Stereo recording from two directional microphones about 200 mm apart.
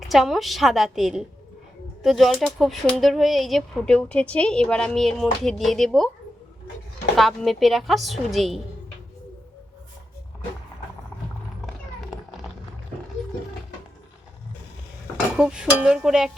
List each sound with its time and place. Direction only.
0.1 s speech: centre (ahead or behind)
7.2 s speech: centre (ahead or behind)
15.4 s speech: 5° right (ahead or behind)